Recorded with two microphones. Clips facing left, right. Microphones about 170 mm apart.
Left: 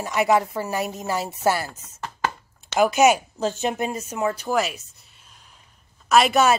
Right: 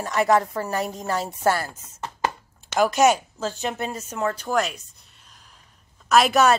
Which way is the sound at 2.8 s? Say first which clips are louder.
Left 1 dB; 5° left (ahead or behind).